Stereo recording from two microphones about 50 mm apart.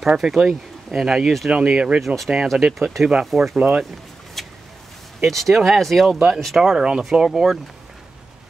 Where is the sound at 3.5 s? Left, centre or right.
Right.